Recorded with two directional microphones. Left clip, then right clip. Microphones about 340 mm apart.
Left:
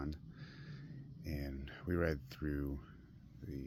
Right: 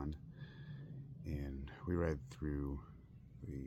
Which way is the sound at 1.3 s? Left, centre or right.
Centre.